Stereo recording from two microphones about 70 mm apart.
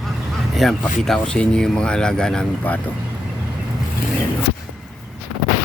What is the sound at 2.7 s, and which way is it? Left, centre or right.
Speech, left.